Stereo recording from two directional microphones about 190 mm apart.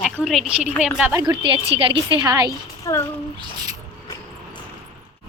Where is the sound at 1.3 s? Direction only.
25° right (ahead or behind).